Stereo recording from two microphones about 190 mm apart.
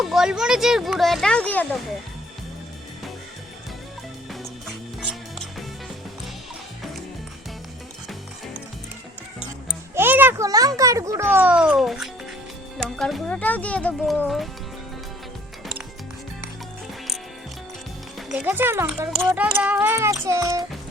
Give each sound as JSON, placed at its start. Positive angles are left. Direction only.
{"t": 0.0, "sound": "speech", "side_deg": 0}
{"t": 4.3, "sound": "music", "side_deg": 0}
{"t": 9.9, "sound": "a child's voice", "side_deg": -10}
{"t": 18.3, "sound": "speech", "side_deg": -10}
{"t": 19.4, "sound": "speech", "side_deg": -5}